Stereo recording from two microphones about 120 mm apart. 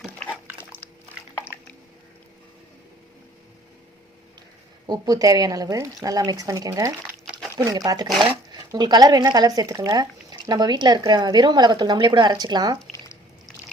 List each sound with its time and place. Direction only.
4.9 s speech: 30° right (ahead or behind)